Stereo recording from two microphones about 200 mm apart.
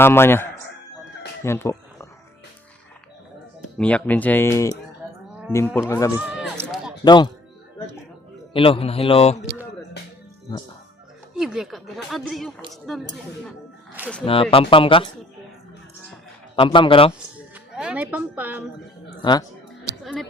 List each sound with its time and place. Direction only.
0.0 s speech: 10° left (ahead or behind)
1.5 s a sound: 15° left (ahead or behind)
3.8 s speech: 5° left (ahead or behind)
6.1 s speech: 5° right (ahead or behind)
6.6 s run: centre (ahead or behind)
7.0 s speech: 20° left (ahead or behind)
8.5 s a man's voice: 25° left (ahead or behind)
11.3 s speech: centre (ahead or behind)
14.5 s a man's voice: 25° left (ahead or behind)
16.6 s a man's voice: 25° left (ahead or behind)
17.5 s speech: 5° right (ahead or behind)
19.2 s a man's voice: 20° left (ahead or behind)